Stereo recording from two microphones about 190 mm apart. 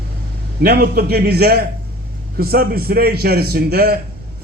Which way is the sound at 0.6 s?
55° right (ahead or behind).